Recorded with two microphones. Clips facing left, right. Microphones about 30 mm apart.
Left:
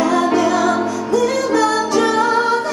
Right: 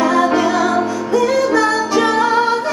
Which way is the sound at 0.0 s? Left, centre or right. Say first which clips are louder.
Right 1 dB; centre.